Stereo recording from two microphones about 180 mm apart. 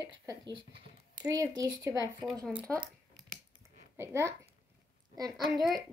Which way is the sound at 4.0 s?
15° right (ahead or behind).